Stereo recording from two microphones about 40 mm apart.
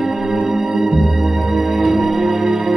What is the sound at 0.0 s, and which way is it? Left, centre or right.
Music, centre.